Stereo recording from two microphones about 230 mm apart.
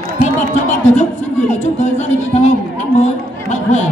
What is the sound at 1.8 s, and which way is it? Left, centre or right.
A man's voice, left.